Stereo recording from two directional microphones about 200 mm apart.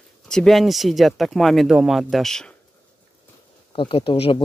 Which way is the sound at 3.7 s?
25° left (ahead or behind).